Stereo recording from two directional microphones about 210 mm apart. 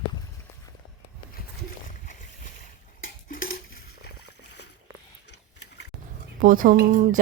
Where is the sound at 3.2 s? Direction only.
40° left (ahead or behind).